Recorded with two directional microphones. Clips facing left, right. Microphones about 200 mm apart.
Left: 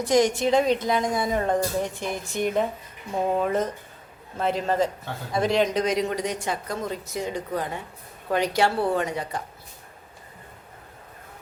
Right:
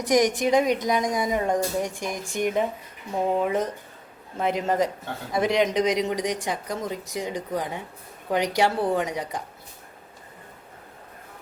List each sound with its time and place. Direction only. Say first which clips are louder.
0.0 s a woman's voice: even; 15° right (ahead or behind)